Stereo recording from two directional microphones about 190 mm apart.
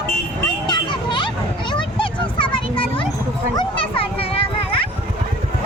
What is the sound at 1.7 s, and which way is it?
Children playing, 25° left (ahead or behind).